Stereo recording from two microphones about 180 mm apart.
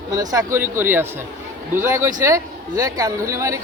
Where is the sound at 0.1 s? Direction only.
20° right (ahead or behind).